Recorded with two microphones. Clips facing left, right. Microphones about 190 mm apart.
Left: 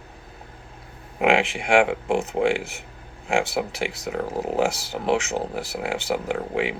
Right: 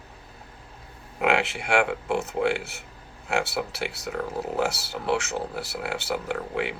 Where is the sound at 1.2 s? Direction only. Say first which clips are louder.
Left 4 dB; 15° left (ahead or behind).